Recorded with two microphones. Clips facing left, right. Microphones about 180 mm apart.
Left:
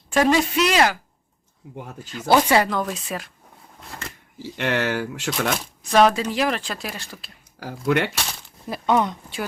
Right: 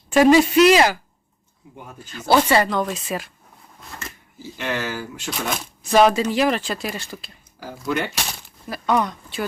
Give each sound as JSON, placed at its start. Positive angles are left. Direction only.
{"t": 0.1, "sound": "speech", "side_deg": -5}
{"t": 2.0, "sound": "speech", "side_deg": 15}
{"t": 4.5, "sound": "speech", "side_deg": 70}
{"t": 5.8, "sound": "speech", "side_deg": -5}
{"t": 7.9, "sound": "speech", "side_deg": 75}
{"t": 8.7, "sound": "speech", "side_deg": 25}